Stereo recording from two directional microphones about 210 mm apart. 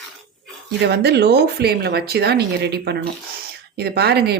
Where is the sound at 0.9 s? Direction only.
50° right (ahead or behind).